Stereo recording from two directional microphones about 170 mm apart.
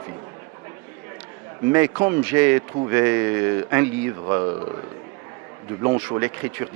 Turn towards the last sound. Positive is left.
turn(degrees=-15)  # may be behind; listen again after turning